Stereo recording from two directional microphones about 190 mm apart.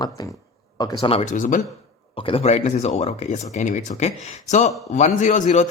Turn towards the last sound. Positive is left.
turn(degrees=40)  # may be behind; listen again after turning